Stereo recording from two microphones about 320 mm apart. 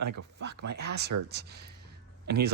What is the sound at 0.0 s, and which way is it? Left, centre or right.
Speech, right.